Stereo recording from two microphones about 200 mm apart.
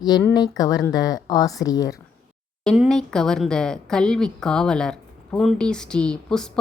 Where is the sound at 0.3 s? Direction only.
20° left (ahead or behind).